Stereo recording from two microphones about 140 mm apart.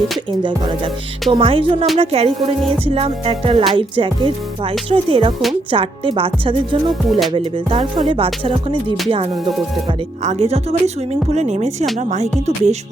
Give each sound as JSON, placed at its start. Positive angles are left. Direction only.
{"t": 0.3, "sound": "music", "side_deg": -35}
{"t": 2.8, "sound": "speech", "side_deg": -45}
{"t": 3.7, "sound": "music", "side_deg": -40}
{"t": 10.2, "sound": "speech", "side_deg": -50}